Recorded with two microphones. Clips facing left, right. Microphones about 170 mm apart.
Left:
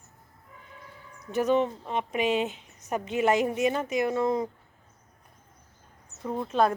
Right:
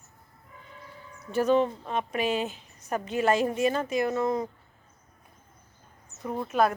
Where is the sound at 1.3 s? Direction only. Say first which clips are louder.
Right 1 dB; 20° left (ahead or behind).